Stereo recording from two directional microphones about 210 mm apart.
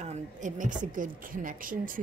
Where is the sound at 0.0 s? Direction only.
35° right (ahead or behind).